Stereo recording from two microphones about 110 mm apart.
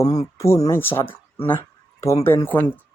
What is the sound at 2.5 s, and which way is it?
Speech, 15° left (ahead or behind).